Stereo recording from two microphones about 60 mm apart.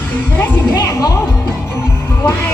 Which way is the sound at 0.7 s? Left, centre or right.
Left.